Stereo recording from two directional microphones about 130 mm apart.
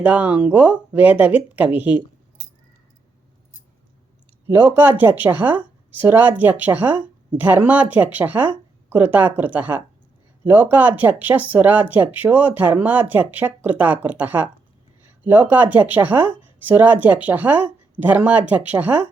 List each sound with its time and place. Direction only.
0.0 s speech: 10° right (ahead or behind)
4.4 s speech: 20° right (ahead or behind)